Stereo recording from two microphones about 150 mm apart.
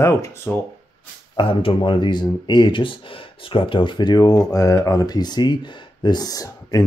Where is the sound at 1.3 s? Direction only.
35° left (ahead or behind).